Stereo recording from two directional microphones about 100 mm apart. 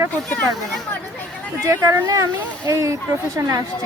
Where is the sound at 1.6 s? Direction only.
30° right (ahead or behind).